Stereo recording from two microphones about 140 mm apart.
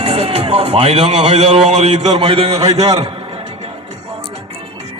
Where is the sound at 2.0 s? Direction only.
40° right (ahead or behind).